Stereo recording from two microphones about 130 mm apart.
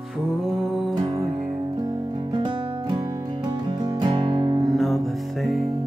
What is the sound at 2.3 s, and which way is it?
Music, 35° right (ahead or behind).